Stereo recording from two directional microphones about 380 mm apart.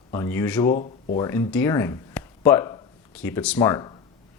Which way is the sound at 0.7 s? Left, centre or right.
Centre.